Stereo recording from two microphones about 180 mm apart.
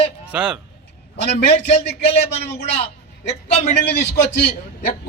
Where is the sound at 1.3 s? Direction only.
65° left (ahead or behind).